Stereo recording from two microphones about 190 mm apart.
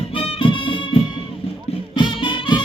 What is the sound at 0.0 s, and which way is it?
Music, 30° left (ahead or behind).